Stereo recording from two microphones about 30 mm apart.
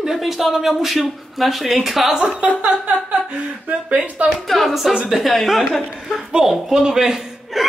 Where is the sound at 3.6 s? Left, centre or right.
Right.